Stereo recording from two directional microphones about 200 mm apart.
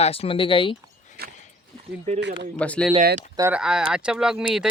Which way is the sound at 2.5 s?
5° left (ahead or behind).